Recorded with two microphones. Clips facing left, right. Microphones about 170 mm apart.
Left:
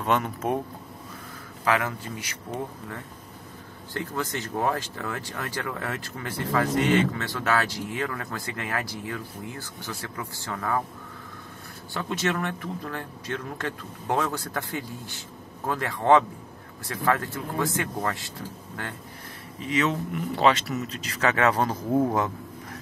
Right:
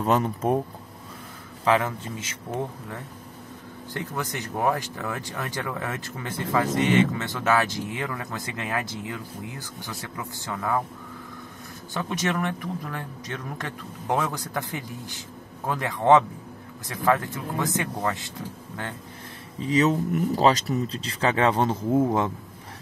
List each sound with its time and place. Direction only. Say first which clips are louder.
0.0 s speech: right 3 dB; 35° right (ahead or behind)
1.6 s speech: right 3 dB; 25° right (ahead or behind)
3.9 s speech: left 1 dB; 15° right (ahead or behind)
11.9 s speech: even; 15° right (ahead or behind)
19.6 s speech: right 4 dB; 35° right (ahead or behind)